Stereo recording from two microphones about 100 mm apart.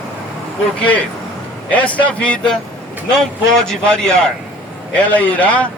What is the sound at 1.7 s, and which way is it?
Speech, 15° left (ahead or behind).